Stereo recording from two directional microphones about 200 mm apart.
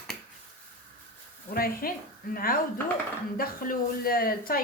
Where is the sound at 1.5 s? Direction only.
45° left (ahead or behind).